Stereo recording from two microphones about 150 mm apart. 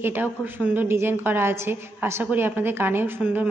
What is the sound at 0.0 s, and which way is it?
A woman's voice, 15° right (ahead or behind).